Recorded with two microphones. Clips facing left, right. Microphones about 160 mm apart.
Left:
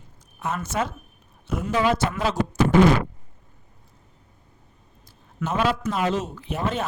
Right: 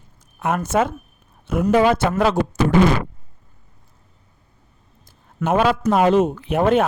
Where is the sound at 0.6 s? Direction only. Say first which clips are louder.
Right 9 dB; 50° right (ahead or behind).